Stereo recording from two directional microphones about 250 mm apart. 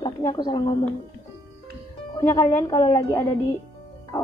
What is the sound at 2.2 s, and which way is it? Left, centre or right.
Speech, centre.